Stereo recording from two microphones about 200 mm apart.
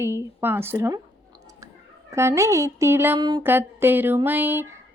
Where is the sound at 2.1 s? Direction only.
15° right (ahead or behind).